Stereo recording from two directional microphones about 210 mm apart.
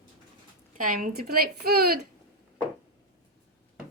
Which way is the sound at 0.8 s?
40° right (ahead or behind).